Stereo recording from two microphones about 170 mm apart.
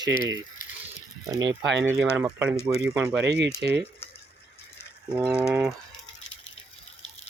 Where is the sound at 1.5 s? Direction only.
90° right.